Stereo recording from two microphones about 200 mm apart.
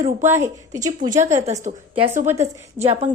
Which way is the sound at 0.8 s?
20° right (ahead or behind).